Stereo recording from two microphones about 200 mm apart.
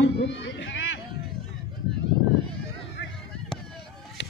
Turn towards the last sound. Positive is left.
turn(degrees=65)  # may be behind; listen again after turning